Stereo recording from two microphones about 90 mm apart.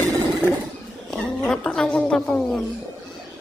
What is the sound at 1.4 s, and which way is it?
Speech, 10° left (ahead or behind).